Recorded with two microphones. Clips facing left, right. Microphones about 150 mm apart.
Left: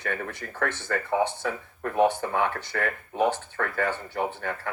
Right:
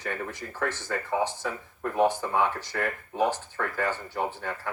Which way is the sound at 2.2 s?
60° left (ahead or behind).